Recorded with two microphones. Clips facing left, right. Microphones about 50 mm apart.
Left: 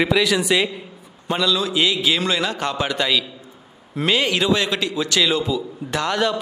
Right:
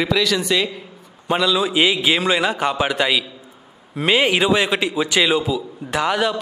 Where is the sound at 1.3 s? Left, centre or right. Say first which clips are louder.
Right 2 dB; centre.